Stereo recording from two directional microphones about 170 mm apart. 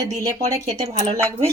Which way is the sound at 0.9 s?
35° right (ahead or behind).